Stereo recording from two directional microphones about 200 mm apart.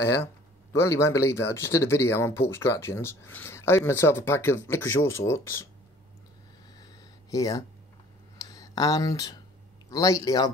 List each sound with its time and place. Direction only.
0.0 s speech: 15° left (ahead or behind)
6.8 s a sound: 15° left (ahead or behind)
9.8 s speech: 15° left (ahead or behind)